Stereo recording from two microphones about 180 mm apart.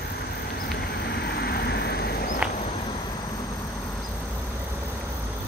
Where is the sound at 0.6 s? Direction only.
65° left (ahead or behind).